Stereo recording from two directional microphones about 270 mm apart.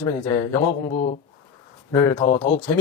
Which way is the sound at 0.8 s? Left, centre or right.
Left.